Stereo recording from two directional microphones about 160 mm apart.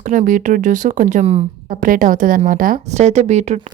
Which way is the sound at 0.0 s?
55° right (ahead or behind).